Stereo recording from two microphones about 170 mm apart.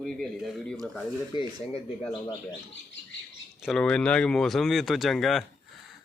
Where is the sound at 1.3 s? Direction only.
25° left (ahead or behind).